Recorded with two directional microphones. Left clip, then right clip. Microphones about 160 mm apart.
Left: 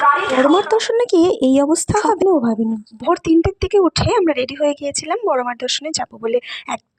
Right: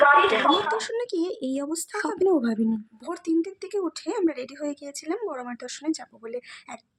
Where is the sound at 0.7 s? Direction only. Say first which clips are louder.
Left 12 dB; 40° left (ahead or behind).